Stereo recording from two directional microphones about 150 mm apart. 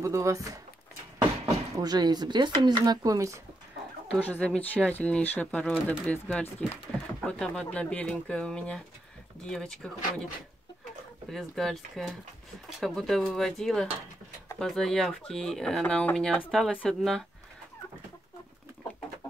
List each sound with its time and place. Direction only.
0.0 s speech: 20° right (ahead or behind)
4.1 s speech: 10° left (ahead or behind)
11.2 s speech: centre (ahead or behind)